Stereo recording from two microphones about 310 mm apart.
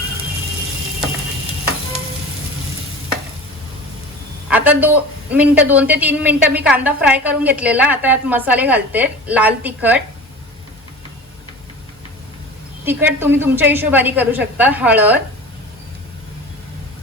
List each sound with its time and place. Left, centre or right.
4.4 s a woman's voice: centre
12.8 s a woman's voice: centre